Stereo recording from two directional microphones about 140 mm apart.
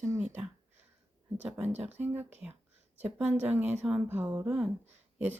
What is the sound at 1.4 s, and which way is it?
Speech, 15° right (ahead or behind).